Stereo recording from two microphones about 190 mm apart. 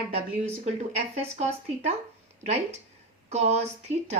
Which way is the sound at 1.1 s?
35° right (ahead or behind).